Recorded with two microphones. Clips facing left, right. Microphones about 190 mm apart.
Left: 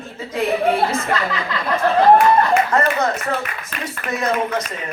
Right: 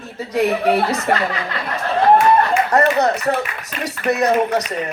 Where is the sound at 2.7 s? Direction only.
40° right (ahead or behind).